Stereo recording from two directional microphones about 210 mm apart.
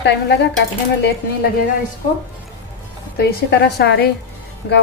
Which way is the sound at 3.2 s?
50° left (ahead or behind).